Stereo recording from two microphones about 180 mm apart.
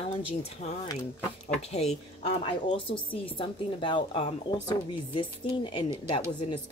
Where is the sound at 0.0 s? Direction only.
35° left (ahead or behind).